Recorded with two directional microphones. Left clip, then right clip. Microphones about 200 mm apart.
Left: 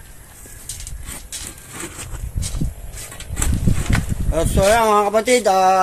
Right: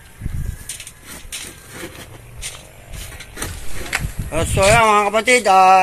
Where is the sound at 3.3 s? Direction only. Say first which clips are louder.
Left 5 dB; 25° left (ahead or behind).